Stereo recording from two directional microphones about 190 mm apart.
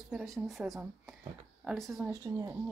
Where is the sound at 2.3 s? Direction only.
15° right (ahead or behind).